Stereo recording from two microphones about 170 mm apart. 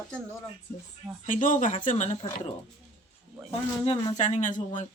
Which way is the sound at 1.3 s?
50° left (ahead or behind).